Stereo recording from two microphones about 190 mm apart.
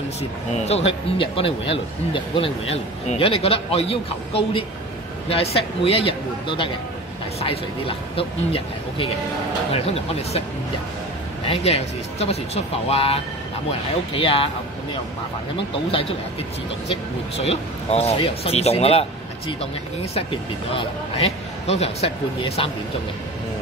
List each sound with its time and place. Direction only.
0.2 s a man's voice: 35° left (ahead or behind)
11.4 s a man's voice: 30° left (ahead or behind)
15.7 s speech: 30° left (ahead or behind)
17.5 s a man's voice: 35° left (ahead or behind)
20.2 s a man's voice: 30° left (ahead or behind)